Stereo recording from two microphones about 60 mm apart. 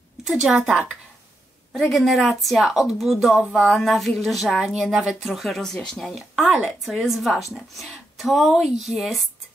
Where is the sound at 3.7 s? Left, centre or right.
Centre.